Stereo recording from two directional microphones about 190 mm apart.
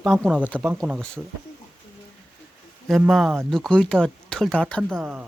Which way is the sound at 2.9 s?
Centre (ahead or behind).